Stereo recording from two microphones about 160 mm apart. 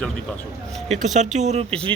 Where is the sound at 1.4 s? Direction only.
45° right (ahead or behind).